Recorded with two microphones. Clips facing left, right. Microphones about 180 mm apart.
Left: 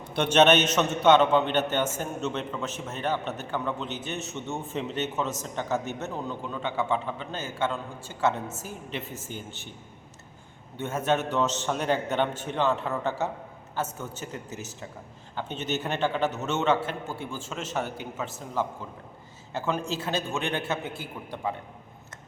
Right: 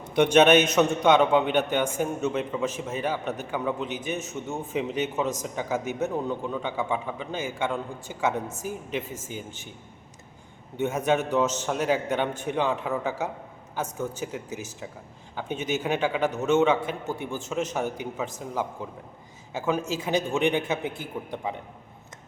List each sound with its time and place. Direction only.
0.1 s a man's voice: 15° right (ahead or behind)
10.8 s a man's voice: 15° right (ahead or behind)